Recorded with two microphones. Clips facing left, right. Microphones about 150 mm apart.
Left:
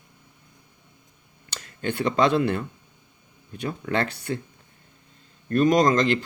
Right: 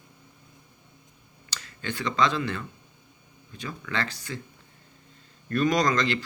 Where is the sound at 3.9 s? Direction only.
55° left (ahead or behind).